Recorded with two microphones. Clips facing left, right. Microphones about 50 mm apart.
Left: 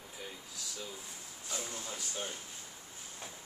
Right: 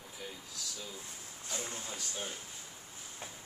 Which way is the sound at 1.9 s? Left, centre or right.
Centre.